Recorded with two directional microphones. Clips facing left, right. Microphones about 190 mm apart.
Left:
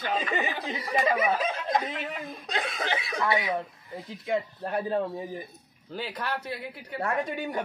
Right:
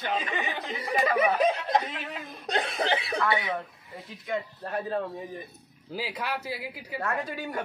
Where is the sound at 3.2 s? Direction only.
25° left (ahead or behind).